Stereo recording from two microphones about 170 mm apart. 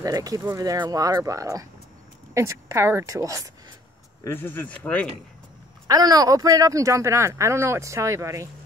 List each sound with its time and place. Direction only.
0.0 s speech: 20° right (ahead or behind)
4.2 s speech: 10° left (ahead or behind)
5.9 s speech: 20° right (ahead or behind)